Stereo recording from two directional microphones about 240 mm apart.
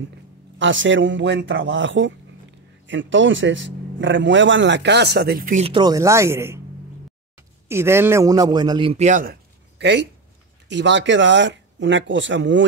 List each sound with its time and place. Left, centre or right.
0.6 s speech: right; by 6.6 s centre
7.6 s a man's voice: centre; by 12.6 s right